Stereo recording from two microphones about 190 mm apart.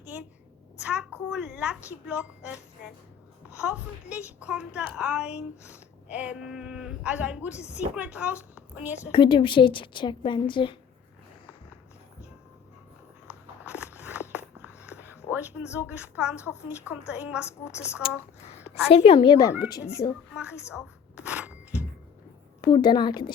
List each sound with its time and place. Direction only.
0.8 s a child's voice: 5° right (ahead or behind)
3.6 s speech: 5° right (ahead or behind)
8.5 s a sound: 10° right (ahead or behind)
9.1 s a woman's voice: 25° left (ahead or behind)
13.7 s walk: 10° right (ahead or behind)
15.3 s speech: 5° right (ahead or behind)
17.4 s a woman's voice: 15° left (ahead or behind)
18.9 s a woman's voice: 30° left (ahead or behind)
20.3 s a woman's voice: 5° right (ahead or behind)
21.2 s a sound: 5° right (ahead or behind)
22.6 s a woman's voice: 20° left (ahead or behind)